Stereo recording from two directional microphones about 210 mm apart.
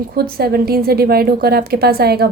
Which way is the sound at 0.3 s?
45° right (ahead or behind).